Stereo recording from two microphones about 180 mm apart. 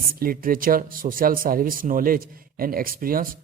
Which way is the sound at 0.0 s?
55° right (ahead or behind).